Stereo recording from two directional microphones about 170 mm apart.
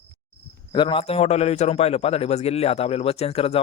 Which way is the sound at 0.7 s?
30° left (ahead or behind).